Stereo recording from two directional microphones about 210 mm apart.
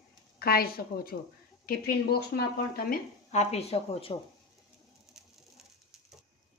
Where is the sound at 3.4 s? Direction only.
30° left (ahead or behind).